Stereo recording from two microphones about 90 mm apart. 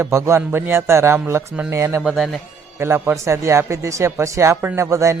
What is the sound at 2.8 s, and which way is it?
A man's voice, 25° right (ahead or behind).